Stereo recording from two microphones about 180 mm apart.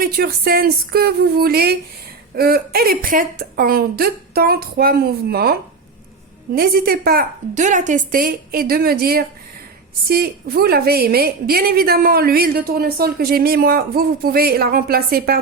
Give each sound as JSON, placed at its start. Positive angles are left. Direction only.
{"t": 0.0, "sound": "a woman's voice", "side_deg": -60}